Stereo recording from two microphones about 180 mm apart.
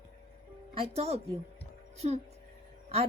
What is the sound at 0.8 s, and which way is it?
Speech, 35° right (ahead or behind).